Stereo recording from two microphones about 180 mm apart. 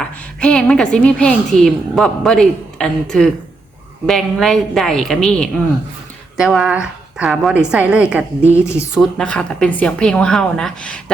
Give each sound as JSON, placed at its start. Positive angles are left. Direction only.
{"t": 0.0, "sound": "a woman's voice", "side_deg": 5}
{"t": 8.5, "sound": "a woman's voice", "side_deg": 15}